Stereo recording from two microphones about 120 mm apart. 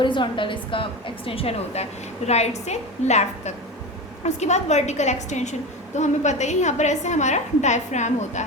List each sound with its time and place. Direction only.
0.0 s a woman's voice: 40° left (ahead or behind); by 8.4 s 75° left (ahead or behind)